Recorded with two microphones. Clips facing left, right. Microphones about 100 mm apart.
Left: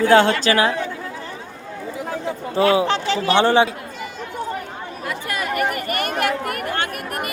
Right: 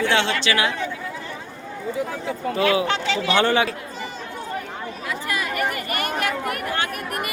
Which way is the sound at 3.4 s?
25° left (ahead or behind).